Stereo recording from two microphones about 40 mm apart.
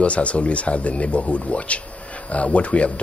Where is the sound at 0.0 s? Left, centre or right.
Left.